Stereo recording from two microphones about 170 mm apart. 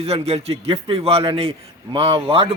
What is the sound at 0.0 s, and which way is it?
A man's voice, 35° right (ahead or behind).